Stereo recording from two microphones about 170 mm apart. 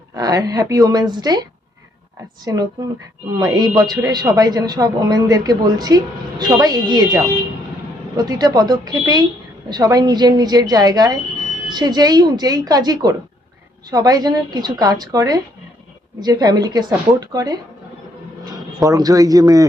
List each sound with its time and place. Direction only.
0.2 s a woman's voice: 20° right (ahead or behind)